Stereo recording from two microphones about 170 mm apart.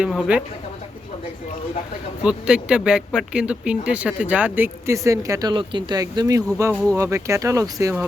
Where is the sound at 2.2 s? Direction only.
5° right (ahead or behind).